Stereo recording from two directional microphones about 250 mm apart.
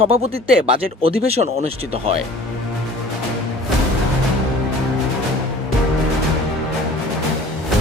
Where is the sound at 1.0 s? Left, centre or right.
Right.